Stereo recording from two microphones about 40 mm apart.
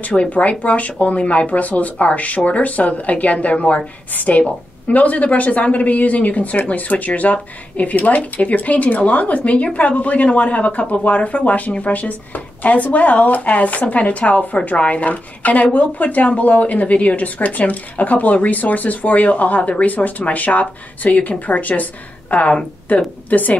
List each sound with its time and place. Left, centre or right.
0.3 s speech: left